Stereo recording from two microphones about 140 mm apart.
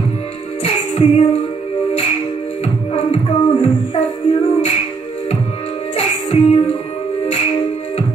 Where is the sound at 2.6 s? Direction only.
50° left (ahead or behind).